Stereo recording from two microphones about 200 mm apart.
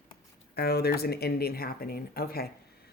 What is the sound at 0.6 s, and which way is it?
Speech, 50° left (ahead or behind).